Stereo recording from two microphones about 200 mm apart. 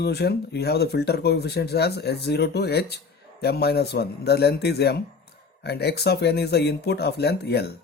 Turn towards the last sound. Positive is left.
turn(degrees=55)  # may be behind; listen again after turning